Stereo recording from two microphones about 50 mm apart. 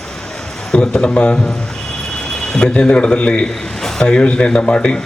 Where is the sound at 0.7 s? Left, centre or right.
Left.